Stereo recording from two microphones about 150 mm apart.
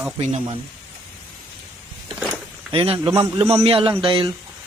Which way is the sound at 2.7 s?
40° right (ahead or behind).